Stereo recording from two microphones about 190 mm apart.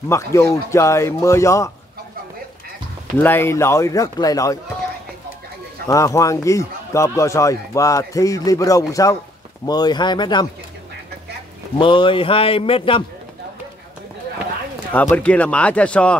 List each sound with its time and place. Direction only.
0.1 s speech: 15° left (ahead or behind)
3.2 s speech: 10° left (ahead or behind)
5.9 s speech: 15° left (ahead or behind)
11.8 s speech: 25° left (ahead or behind)
14.9 s speech: 10° left (ahead or behind)